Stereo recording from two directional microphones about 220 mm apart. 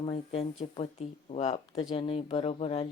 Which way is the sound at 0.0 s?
25° left (ahead or behind).